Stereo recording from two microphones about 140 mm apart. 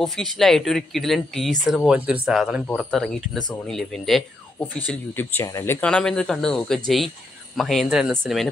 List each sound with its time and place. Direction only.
0.0 s speech: centre (ahead or behind)
4.6 s speech: 15° left (ahead or behind)
5.8 s speech: 5° left (ahead or behind)